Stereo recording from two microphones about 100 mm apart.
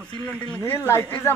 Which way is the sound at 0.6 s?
25° left (ahead or behind).